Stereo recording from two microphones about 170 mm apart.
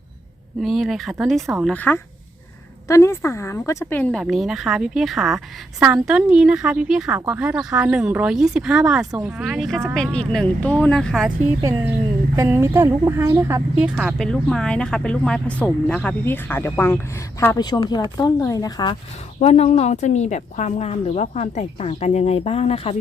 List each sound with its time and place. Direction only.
0.6 s speech: centre (ahead or behind)
12.4 s a woman's voice: 15° right (ahead or behind); by 17.6 s 15° left (ahead or behind)
17.6 s speech: 25° left (ahead or behind)
19.4 s a woman's voice: 40° left (ahead or behind)